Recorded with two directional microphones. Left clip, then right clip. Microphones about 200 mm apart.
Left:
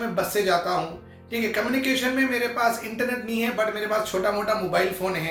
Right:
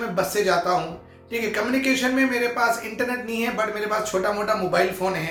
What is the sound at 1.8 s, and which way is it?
Speech, 20° right (ahead or behind).